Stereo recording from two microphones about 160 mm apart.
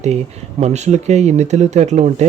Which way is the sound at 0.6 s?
45° right (ahead or behind).